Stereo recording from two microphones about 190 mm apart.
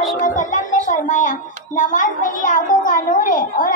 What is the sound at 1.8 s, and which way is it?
A child's voice, 45° left (ahead or behind).